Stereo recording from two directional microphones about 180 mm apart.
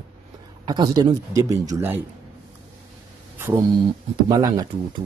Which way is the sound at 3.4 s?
15° right (ahead or behind).